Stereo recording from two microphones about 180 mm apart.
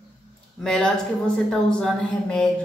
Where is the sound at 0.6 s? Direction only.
5° left (ahead or behind).